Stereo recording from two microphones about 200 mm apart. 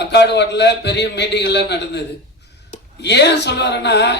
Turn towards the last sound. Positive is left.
turn(degrees=55)  # may be behind; listen again after turning